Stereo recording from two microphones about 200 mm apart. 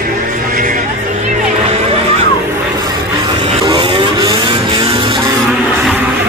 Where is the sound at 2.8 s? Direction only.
20° right (ahead or behind).